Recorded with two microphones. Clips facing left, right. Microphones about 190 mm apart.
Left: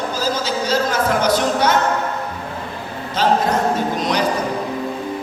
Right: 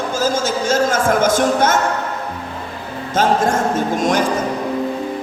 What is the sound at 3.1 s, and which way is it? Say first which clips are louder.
Music: right 1 dB; 45° right (ahead or behind).